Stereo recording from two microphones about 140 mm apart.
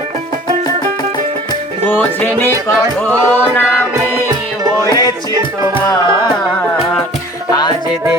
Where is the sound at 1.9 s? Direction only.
15° left (ahead or behind).